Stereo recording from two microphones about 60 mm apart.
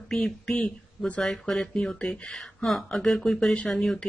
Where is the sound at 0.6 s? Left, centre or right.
Left.